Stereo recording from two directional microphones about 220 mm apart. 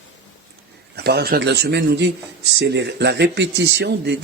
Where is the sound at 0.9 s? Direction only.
45° right (ahead or behind).